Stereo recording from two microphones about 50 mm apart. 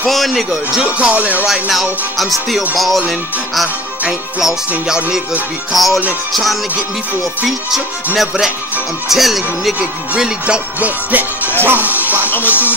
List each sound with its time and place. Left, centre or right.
0.0 s speech: centre
0.9 s music: right
1.5 s speech: centre
4.4 s music: centre
5.7 s speech: centre
9.1 s speech: centre
10.4 s music: right
11.6 s speech: right
12.3 s speech: left